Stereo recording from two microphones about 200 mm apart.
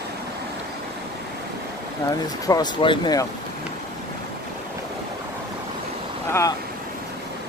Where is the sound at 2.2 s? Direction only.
20° left (ahead or behind).